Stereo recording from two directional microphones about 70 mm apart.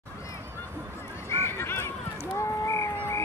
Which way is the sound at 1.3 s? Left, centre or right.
Left.